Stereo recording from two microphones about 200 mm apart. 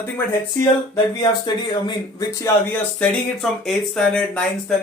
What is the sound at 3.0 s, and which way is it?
Speech, centre (ahead or behind).